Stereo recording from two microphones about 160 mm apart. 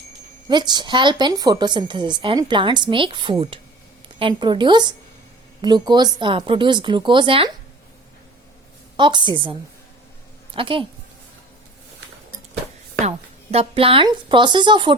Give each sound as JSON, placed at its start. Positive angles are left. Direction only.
{"t": 0.4, "sound": "a woman's voice", "side_deg": -25}
{"t": 9.0, "sound": "a woman's voice", "side_deg": -30}
{"t": 13.1, "sound": "speech", "side_deg": -40}